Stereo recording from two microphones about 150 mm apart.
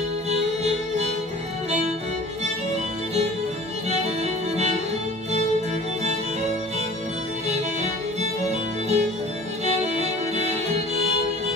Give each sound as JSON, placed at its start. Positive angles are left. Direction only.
{"t": 3.9, "sound": "music", "side_deg": -45}
{"t": 7.4, "sound": "music", "side_deg": -50}